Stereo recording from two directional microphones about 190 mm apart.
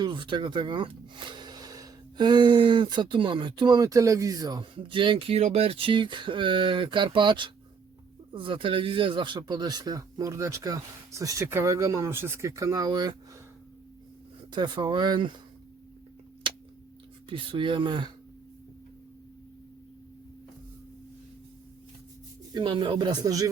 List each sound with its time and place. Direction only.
0.0 s speech: 25° right (ahead or behind)
14.5 s speech: 25° right (ahead or behind)
16.4 s a sound: 25° right (ahead or behind)
17.2 s speech: 25° right (ahead or behind)
22.5 s speech: 25° right (ahead or behind)